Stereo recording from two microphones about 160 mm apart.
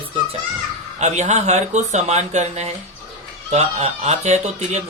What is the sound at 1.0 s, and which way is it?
Speech, 45° right (ahead or behind).